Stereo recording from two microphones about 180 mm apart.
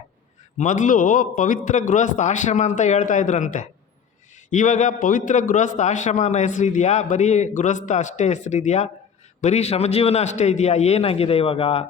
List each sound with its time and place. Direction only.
0.6 s a man's voice: 45° left (ahead or behind)